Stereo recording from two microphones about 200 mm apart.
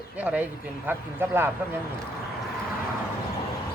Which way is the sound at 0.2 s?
5° right (ahead or behind).